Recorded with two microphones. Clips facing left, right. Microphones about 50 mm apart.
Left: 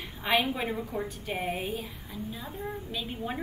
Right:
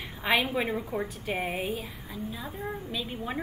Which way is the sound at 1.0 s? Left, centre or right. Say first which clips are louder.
Right 1 dB; centre.